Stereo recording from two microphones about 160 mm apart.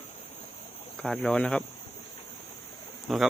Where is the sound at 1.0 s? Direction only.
5° left (ahead or behind).